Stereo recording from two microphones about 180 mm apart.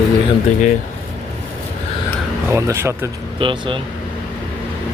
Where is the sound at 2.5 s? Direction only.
15° right (ahead or behind).